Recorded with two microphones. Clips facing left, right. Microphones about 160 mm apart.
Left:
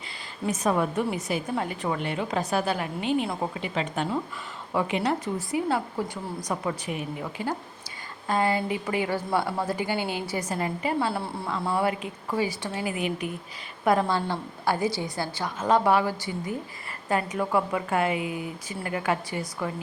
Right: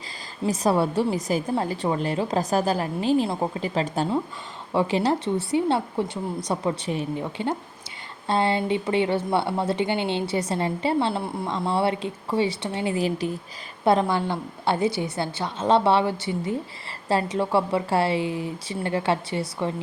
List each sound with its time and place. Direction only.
0.4 s a woman's voice: 35° right (ahead or behind)
14.1 s a woman's voice: 15° right (ahead or behind)